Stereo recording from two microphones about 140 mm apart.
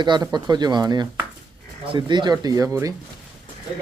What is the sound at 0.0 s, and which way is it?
A man's voice, 30° right (ahead or behind).